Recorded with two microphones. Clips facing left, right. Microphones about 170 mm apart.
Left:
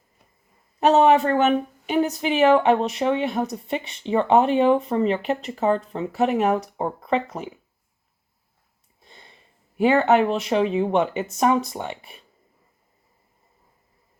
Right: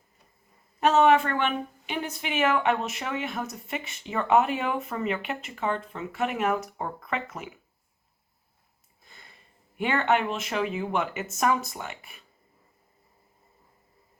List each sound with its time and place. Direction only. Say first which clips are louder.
0.8 s speech: left 4 dB; 35° left (ahead or behind)
9.0 s sniff: left 4 dB; 30° left (ahead or behind)
9.7 s speech: left 8 dB; 35° left (ahead or behind)